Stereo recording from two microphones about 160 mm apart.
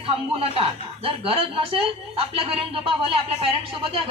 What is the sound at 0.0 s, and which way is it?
Speech, 35° right (ahead or behind).